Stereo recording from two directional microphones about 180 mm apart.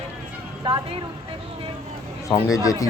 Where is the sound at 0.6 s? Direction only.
30° right (ahead or behind).